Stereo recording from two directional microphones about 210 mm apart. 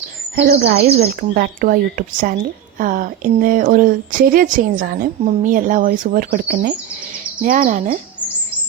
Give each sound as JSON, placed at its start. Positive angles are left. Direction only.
{"t": 0.3, "sound": "a woman's voice", "side_deg": -50}